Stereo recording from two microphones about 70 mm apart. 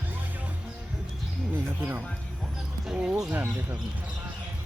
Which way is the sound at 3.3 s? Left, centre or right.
Right.